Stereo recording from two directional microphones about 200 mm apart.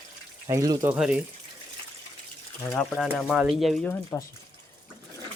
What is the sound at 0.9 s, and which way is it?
Speech, 5° right (ahead or behind).